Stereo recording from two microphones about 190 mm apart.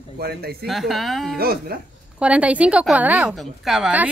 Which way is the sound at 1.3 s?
55° right (ahead or behind).